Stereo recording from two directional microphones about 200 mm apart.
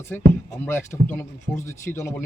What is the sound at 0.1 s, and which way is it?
Speech, 10° left (ahead or behind).